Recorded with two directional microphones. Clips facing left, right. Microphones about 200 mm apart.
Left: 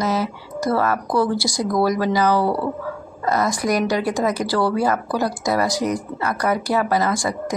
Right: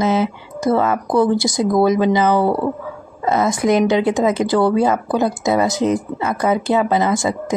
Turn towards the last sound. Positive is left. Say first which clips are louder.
# right 4 dB
turn(degrees=-25)  # may be behind; listen again after turning